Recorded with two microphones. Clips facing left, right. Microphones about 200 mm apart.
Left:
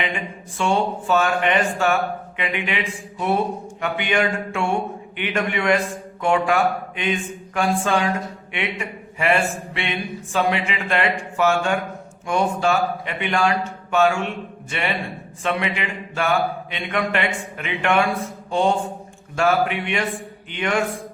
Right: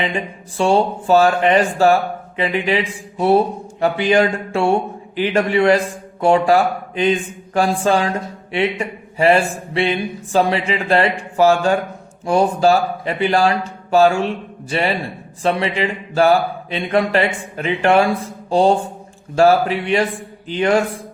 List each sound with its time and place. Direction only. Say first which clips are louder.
0.0 s speech: right 5 dB; 35° right (ahead or behind)